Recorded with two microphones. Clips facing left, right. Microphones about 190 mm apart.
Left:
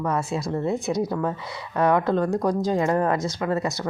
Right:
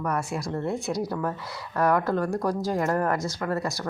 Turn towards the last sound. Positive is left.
turn(degrees=20)  # may be behind; listen again after turning